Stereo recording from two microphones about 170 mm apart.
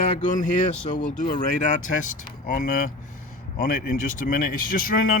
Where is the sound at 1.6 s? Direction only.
45° left (ahead or behind).